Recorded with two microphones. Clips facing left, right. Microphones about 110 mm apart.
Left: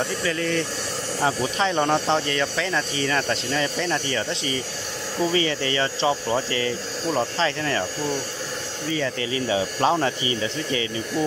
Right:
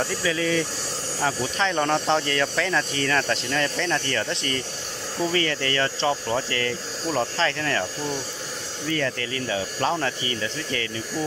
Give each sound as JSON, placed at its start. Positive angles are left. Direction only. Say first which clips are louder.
{"t": 0.0, "sound": "speech", "louder": "even", "side_deg": 0}
{"t": 1.2, "sound": "speech", "louder": "left 2 dB", "side_deg": 15}